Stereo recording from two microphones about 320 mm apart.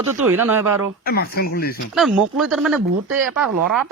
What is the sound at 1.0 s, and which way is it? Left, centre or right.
Speech, left.